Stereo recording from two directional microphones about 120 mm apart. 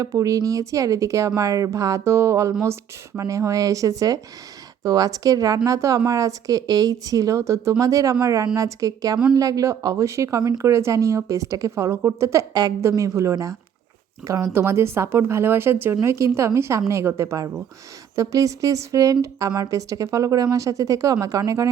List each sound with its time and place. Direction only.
0.0 s speech: 25° right (ahead or behind)